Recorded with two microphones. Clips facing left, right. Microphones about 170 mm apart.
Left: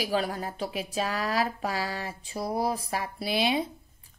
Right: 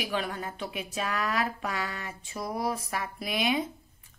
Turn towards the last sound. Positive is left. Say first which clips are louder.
# left 2 dB
turn(degrees=30)  # may be behind; listen again after turning